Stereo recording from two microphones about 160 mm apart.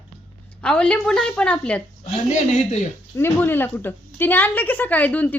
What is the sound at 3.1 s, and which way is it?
A woman's voice, 15° left (ahead or behind).